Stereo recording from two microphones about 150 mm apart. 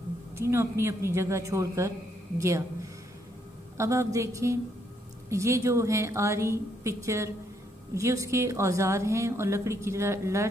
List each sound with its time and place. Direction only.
0.4 s a woman's voice: 15° right (ahead or behind)